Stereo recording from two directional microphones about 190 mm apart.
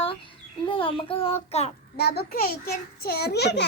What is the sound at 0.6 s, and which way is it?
A child's voice, 25° left (ahead or behind).